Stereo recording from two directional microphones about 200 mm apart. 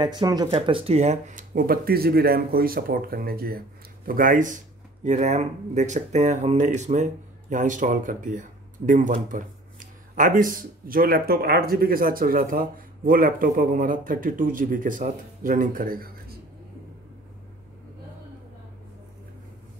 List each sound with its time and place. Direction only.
0.0 s speech: 20° right (ahead or behind); by 16.3 s 45° right (ahead or behind)